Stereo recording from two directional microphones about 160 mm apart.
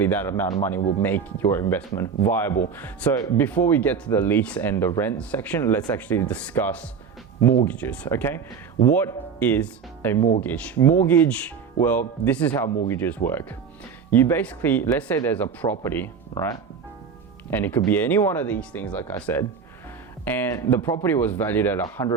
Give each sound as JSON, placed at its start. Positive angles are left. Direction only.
{"t": 0.0, "sound": "speech", "side_deg": 10}
{"t": 22.0, "sound": "speech", "side_deg": 25}